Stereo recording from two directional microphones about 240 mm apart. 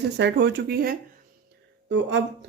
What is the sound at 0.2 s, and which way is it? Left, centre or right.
Speech, right.